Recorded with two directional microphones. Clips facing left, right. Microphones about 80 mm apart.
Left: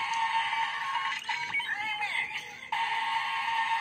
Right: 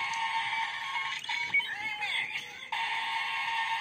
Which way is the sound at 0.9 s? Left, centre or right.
Left.